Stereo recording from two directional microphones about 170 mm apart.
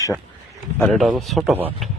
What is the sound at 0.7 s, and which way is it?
Speech, 5° left (ahead or behind).